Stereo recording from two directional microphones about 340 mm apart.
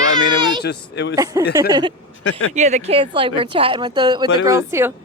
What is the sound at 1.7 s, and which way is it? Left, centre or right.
Speech, centre.